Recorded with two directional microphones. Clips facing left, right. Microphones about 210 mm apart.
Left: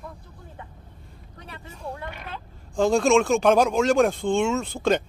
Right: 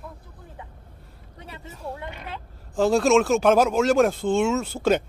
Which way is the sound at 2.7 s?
5° right (ahead or behind).